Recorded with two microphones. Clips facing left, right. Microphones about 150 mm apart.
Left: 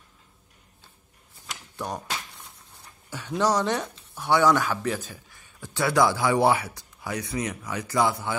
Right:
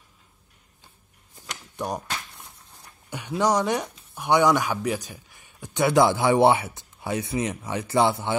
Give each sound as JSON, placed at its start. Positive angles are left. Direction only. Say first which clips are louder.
{"t": 1.8, "sound": "speech", "louder": "right 3 dB", "side_deg": -10}
{"t": 3.1, "sound": "a man's voice", "louder": "right 1 dB", "side_deg": -15}